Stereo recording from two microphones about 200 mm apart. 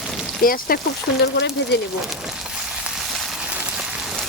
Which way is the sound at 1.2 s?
60° left (ahead or behind).